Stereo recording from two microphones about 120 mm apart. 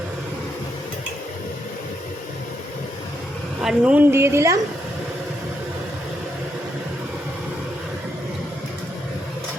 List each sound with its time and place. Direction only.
3.6 s speech: 5° right (ahead or behind)
4.1 s a woman's voice: 20° right (ahead or behind)